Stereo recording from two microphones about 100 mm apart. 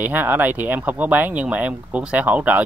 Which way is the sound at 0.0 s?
20° right (ahead or behind).